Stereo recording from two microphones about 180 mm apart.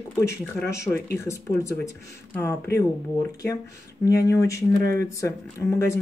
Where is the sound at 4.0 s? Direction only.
15° left (ahead or behind).